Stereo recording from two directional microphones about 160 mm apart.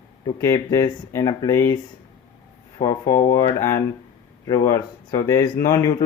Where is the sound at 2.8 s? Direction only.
20° left (ahead or behind).